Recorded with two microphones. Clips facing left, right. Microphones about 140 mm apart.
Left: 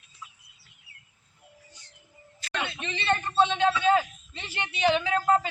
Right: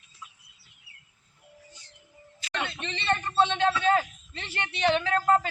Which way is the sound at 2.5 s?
Centre (ahead or behind).